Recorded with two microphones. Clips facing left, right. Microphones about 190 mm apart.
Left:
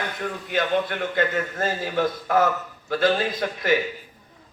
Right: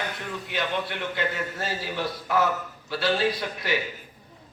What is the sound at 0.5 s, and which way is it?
A man's voice, 50° left (ahead or behind).